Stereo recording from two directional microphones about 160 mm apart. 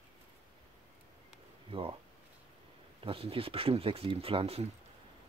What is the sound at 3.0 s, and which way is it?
Speech, 35° right (ahead or behind).